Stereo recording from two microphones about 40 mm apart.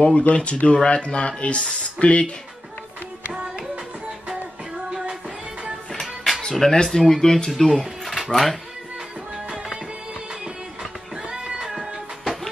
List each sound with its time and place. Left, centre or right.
0.0 s speech: left
6.5 s speech: centre
7.8 s a sound: centre
10.4 s music: centre
11.7 s music: centre